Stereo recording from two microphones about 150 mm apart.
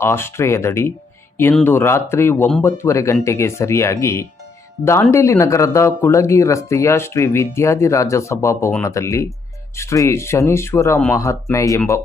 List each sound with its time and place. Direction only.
0.0 s speech: 15° left (ahead or behind)